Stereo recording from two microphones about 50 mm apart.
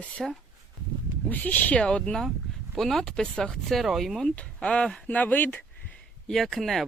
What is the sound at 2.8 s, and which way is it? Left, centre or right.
Speech, centre.